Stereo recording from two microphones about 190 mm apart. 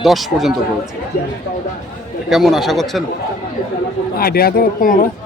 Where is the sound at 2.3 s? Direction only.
Centre (ahead or behind).